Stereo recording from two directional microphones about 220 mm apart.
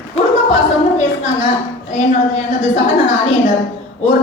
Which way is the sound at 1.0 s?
35° left (ahead or behind).